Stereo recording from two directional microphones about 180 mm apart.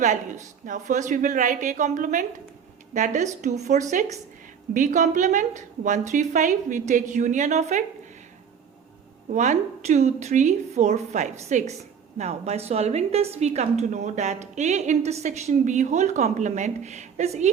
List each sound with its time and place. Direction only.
0.6 s a woman's voice: 45° right (ahead or behind)
9.3 s a woman's voice: 40° right (ahead or behind)